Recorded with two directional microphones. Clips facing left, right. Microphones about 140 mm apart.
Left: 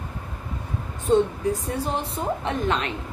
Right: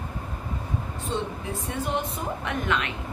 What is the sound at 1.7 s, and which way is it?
A woman's voice, 35° left (ahead or behind).